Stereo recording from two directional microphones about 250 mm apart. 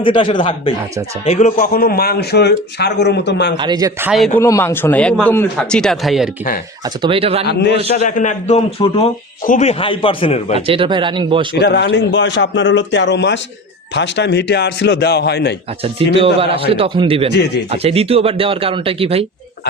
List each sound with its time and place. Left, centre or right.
0.0 s a man's voice: centre; by 3.6 s left
3.6 s speech: centre
4.4 s speech: centre
6.8 s speech: centre
7.4 s speech: left
8.0 s speech: left
10.7 s speech: centre
11.6 s a man's voice: left
16.1 s speech: right
17.3 s a man's voice: left
17.7 s speech: right